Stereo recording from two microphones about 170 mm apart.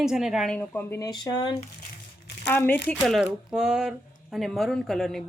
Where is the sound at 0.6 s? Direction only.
15° left (ahead or behind).